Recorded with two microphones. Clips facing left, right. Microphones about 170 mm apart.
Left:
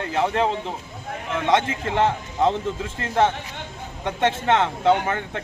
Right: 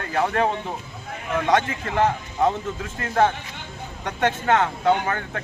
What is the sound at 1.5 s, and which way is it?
Speech, 25° left (ahead or behind).